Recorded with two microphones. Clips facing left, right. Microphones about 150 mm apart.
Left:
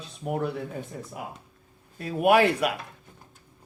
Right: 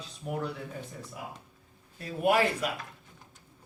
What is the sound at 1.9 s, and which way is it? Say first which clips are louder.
Speech: left 5 dB; 65° left (ahead or behind).